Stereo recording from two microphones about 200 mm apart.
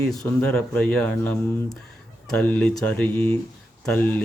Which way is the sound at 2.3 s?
5° left (ahead or behind).